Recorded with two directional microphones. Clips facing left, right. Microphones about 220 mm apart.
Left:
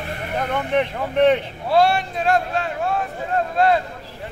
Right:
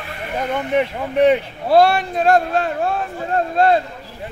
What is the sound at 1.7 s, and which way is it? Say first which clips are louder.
Speech: right 4 dB; 40° right (ahead or behind).